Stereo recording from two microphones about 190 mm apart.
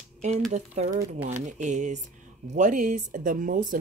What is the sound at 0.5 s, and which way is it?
A woman's voice, 35° right (ahead or behind).